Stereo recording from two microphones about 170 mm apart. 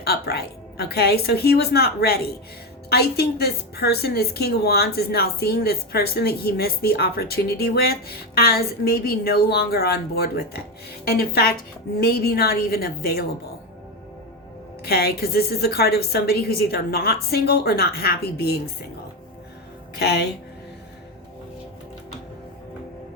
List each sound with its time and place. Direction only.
0.0 s a woman's voice: 70° left (ahead or behind)
14.8 s a woman's voice: 70° left (ahead or behind)
20.0 s a woman's voice: 75° left (ahead or behind)